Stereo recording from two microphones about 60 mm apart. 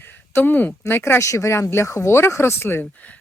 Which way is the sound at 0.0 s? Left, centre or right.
Left.